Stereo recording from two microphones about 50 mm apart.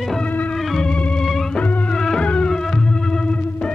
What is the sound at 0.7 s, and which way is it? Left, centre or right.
Organ, centre.